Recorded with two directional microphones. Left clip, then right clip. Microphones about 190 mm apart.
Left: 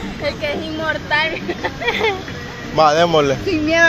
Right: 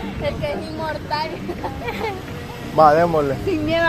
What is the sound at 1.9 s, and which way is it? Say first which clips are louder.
Speech: left 10 dB; 25° left (ahead or behind).